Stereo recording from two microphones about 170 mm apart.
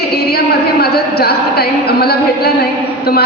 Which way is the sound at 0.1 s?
70° left (ahead or behind).